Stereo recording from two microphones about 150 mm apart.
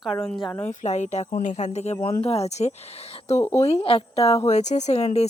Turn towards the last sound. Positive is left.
turn(degrees=45)  # may be behind; listen again after turning